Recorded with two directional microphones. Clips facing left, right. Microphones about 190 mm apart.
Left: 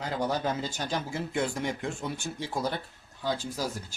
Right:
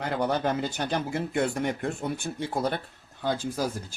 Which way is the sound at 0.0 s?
60° right (ahead or behind).